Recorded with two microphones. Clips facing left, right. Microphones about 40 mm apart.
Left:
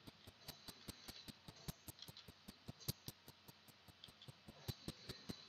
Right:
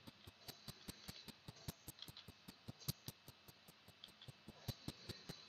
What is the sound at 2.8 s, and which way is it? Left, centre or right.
Music, centre.